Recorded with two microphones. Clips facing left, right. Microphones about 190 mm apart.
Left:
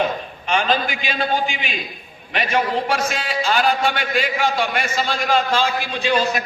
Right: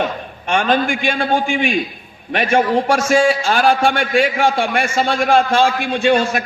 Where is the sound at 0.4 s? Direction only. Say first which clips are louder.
Right 4 dB; 50° right (ahead or behind).